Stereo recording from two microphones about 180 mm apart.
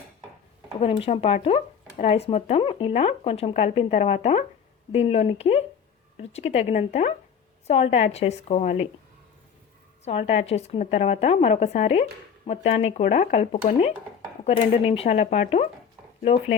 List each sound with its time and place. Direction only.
0.8 s speech: 30° left (ahead or behind)
10.0 s speech: 35° left (ahead or behind)